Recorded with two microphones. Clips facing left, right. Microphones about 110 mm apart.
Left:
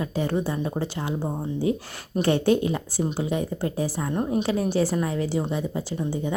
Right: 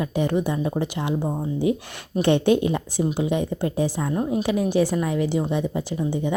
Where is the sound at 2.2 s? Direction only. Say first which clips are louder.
Right 2 dB; 20° right (ahead or behind).